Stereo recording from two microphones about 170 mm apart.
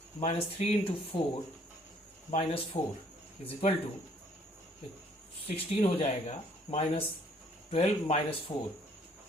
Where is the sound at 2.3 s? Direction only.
35° left (ahead or behind).